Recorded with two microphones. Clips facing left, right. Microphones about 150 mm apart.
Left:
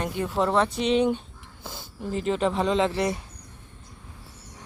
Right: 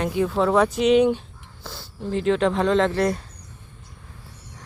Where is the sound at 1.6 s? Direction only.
20° left (ahead or behind).